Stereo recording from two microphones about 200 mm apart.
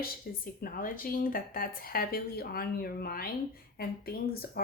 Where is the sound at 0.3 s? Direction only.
50° left (ahead or behind).